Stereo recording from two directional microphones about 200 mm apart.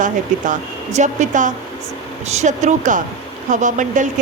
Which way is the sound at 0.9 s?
40° right (ahead or behind).